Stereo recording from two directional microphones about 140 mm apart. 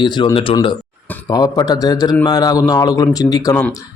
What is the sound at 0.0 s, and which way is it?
Speech, 30° left (ahead or behind).